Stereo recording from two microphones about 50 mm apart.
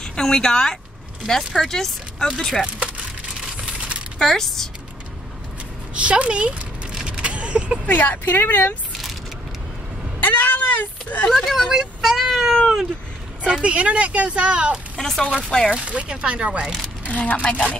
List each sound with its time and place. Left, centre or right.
0.0 s speech: centre
3.6 s coin: right
4.2 s speech: centre
5.9 s speech: right
7.1 s a sound: right
7.8 s speech: left
10.2 s speech: left
11.2 s speech: centre
11.7 s speech: centre
13.4 s speech: right
15.0 s speech: centre
15.7 s speech: right
17.1 s a woman's voice: left